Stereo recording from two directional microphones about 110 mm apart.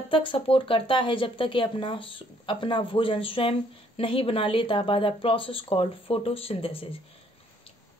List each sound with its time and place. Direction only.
0.1 s speech: 50° left (ahead or behind)